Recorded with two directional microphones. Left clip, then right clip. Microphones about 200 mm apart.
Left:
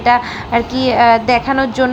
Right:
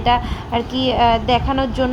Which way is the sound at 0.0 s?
15° left (ahead or behind).